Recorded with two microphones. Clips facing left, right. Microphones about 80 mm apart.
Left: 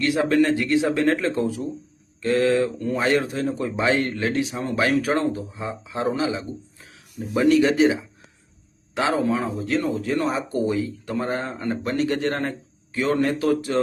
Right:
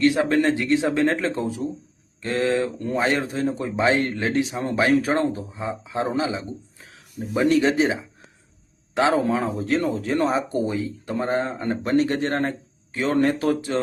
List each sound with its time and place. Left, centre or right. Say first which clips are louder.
0.0 s speech: right 1 dB; right
10.5 s speech: left 1 dB; right